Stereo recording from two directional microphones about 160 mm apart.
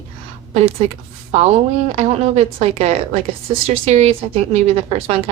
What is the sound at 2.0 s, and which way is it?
Speech, 40° right (ahead or behind).